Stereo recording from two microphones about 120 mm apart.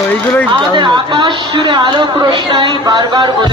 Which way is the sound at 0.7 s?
40° right (ahead or behind).